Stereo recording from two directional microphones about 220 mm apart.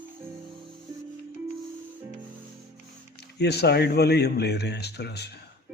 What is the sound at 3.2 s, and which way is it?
Speech, 50° left (ahead or behind).